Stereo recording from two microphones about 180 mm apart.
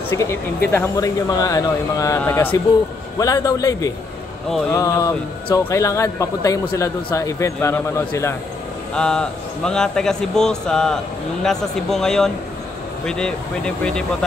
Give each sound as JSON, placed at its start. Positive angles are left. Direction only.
{"t": 0.1, "sound": "a man's voice", "side_deg": 15}
{"t": 8.9, "sound": "a man's voice", "side_deg": 5}